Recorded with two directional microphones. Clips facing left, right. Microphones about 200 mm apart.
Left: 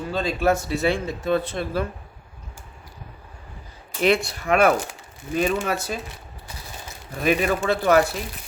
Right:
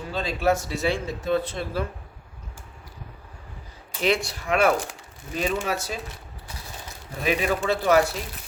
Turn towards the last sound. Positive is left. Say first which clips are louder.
# left 2 dB
turn(degrees=55)  # may be behind; listen again after turning